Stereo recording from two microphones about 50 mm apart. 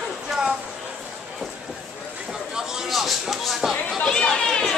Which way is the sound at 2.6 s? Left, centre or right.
Centre.